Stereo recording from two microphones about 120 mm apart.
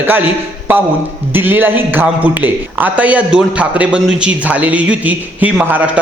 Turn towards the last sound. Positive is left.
turn(degrees=-15)  # may be behind; listen again after turning